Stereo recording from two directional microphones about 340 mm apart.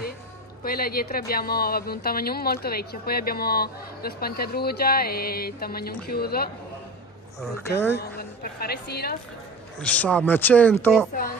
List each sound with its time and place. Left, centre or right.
0.7 s a woman's voice: left
7.5 s speech: centre
8.0 s a woman's voice: left
9.8 s speech: centre